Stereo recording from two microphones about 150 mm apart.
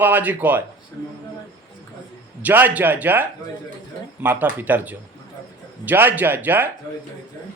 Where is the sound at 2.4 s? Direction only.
10° right (ahead or behind).